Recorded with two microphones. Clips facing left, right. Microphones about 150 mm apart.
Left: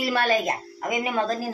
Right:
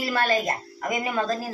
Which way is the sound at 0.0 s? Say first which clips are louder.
Left 1 dB; 15° left (ahead or behind).